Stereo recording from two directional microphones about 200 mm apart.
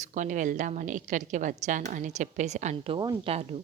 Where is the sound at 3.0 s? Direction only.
25° right (ahead or behind).